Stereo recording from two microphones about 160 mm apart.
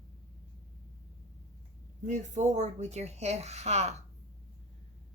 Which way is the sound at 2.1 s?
50° right (ahead or behind).